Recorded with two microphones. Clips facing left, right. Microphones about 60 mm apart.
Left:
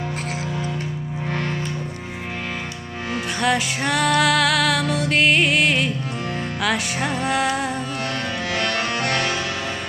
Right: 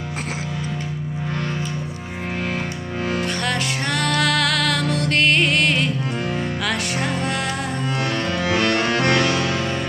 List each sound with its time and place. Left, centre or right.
3.4 s music: centre
8.5 s music: right